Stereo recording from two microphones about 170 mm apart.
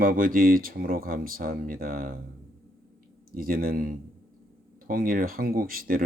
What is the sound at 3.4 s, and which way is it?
Speech, 55° right (ahead or behind).